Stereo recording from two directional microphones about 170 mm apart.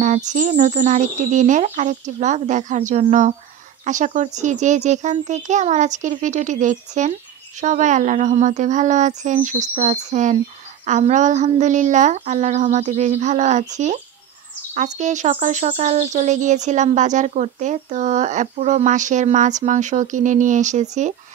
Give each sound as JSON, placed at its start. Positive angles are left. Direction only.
{"t": 0.0, "sound": "speech", "side_deg": -45}